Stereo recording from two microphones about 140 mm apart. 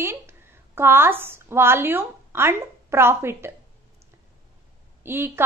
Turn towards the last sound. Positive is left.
turn(degrees=-15)  # may be behind; listen again after turning